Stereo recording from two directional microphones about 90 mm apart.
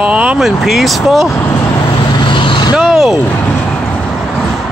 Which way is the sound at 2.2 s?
70° left (ahead or behind).